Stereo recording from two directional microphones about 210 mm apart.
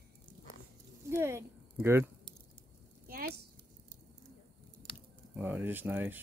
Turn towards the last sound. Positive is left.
turn(degrees=-10)  # may be behind; listen again after turning